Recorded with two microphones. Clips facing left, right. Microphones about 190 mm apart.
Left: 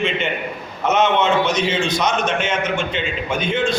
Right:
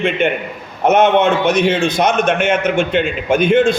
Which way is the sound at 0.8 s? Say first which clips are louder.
Right 5 dB; 55° right (ahead or behind).